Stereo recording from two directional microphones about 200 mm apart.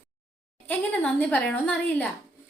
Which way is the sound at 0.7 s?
5° left (ahead or behind).